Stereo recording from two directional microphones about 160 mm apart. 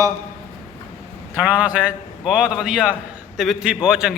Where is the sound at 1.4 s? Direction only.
10° right (ahead or behind).